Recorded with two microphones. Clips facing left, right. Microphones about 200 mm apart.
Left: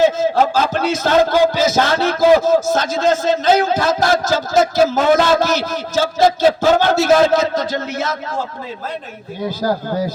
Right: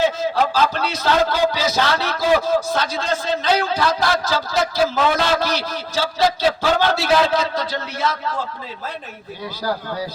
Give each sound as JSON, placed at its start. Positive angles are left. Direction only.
{"t": 0.0, "sound": "a man's voice", "side_deg": 45}
{"t": 9.6, "sound": "a man's voice", "side_deg": 45}